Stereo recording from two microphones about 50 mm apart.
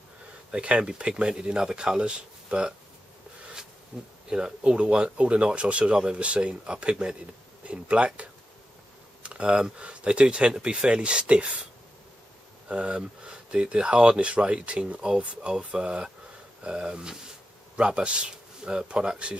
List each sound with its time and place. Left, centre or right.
0.5 s speech: right
3.9 s speech: centre
12.6 s speech: right